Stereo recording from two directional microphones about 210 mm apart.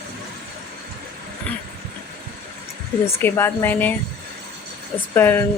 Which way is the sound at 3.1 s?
10° left (ahead or behind).